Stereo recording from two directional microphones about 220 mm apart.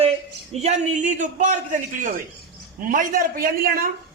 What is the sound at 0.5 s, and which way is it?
A man's voice, 30° right (ahead or behind).